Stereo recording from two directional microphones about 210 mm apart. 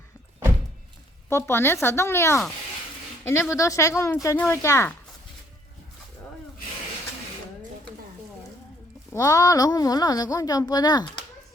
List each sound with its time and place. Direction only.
1.3 s speech: 10° left (ahead or behind)
3.5 s speech: 15° left (ahead or behind)
9.1 s speech: 15° left (ahead or behind)